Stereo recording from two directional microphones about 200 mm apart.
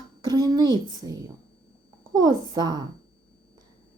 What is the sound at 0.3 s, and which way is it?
A child's voice, 20° right (ahead or behind).